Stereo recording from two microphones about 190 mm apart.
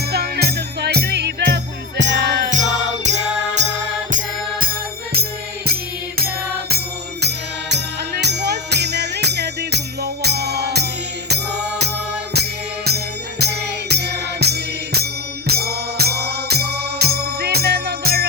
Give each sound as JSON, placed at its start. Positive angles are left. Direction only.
{"t": 0.1, "sound": "music", "side_deg": -55}
{"t": 2.5, "sound": "music", "side_deg": -40}
{"t": 4.6, "sound": "music", "side_deg": -50}
{"t": 12.3, "sound": "music", "side_deg": -60}